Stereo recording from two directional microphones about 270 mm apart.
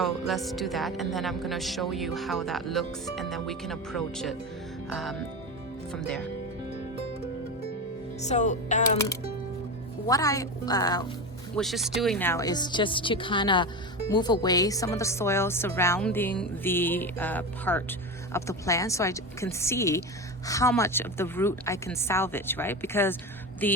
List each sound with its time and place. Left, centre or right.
0.0 s speech: centre
8.2 s music: left
10.1 s a woman's voice: centre
11.5 s a woman's voice: centre